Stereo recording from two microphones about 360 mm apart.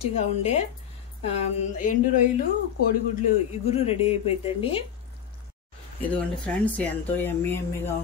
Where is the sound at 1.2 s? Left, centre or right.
Left.